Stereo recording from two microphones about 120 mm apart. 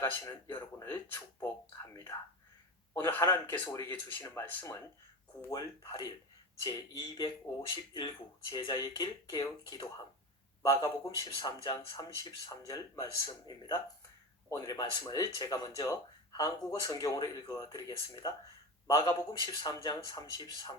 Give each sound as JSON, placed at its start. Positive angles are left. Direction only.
{"t": 0.0, "sound": "speech", "side_deg": 20}
{"t": 2.9, "sound": "speech", "side_deg": 20}
{"t": 5.5, "sound": "speech", "side_deg": 35}